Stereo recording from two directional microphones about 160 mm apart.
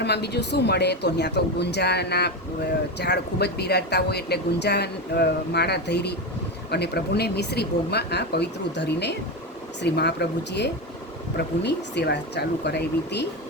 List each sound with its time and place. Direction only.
0.0 s speech: 90° left